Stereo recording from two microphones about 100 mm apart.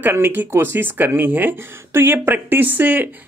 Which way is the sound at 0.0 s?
20° right (ahead or behind).